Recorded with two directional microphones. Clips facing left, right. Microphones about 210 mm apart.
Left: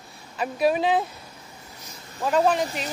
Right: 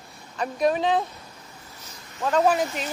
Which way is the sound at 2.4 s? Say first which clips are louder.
Right 1 dB; 5° right (ahead or behind).